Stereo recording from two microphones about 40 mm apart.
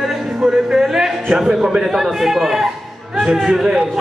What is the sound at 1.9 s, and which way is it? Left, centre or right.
Speech, centre.